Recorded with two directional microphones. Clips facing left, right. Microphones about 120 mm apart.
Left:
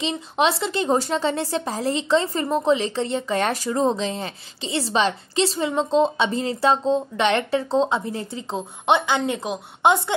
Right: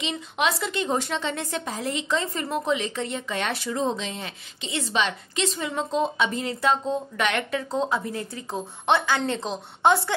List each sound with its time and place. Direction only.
0.0 s a woman's voice: 30° left (ahead or behind)